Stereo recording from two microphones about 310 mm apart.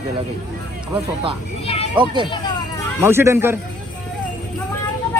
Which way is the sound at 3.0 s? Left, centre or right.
Centre.